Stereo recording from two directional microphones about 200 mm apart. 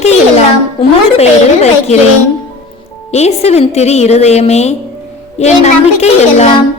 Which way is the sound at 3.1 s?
35° left (ahead or behind).